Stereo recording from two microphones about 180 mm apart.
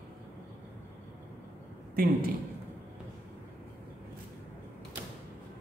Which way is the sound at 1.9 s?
55° right (ahead or behind).